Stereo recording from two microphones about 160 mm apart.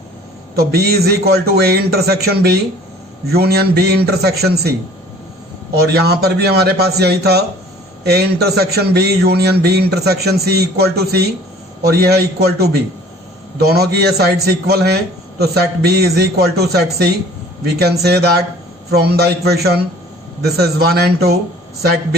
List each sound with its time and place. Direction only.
0.5 s a man's voice: 80° right
5.8 s a man's voice: 85° right